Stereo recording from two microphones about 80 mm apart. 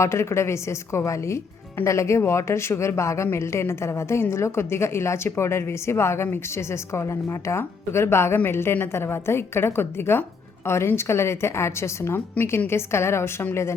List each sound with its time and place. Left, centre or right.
0.0 s a woman's voice: left
7.4 s a woman's voice: left